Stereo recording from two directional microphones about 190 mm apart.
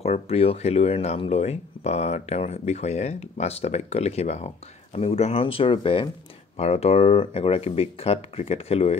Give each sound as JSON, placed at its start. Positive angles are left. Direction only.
{"t": 0.0, "sound": "speech", "side_deg": 30}